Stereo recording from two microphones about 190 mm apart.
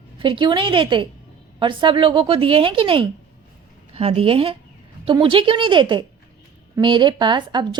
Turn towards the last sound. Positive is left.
turn(degrees=-25)  # may be behind; listen again after turning